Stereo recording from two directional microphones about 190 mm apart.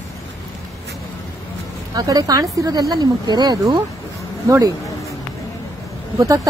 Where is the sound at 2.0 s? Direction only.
20° right (ahead or behind).